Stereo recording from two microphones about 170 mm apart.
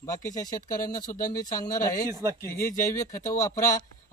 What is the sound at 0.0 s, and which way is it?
A man's voice, 20° left (ahead or behind).